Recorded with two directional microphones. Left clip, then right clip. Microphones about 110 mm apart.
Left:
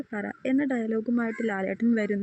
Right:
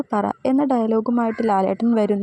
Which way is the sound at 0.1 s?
25° right (ahead or behind).